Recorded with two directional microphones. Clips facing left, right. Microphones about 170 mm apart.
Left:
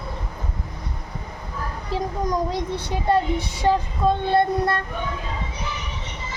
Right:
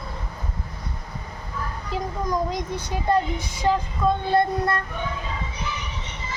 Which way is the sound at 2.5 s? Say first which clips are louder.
Left 2 dB; 30° left (ahead or behind).